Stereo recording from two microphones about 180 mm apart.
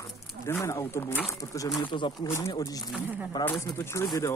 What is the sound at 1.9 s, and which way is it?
Speech, 25° left (ahead or behind).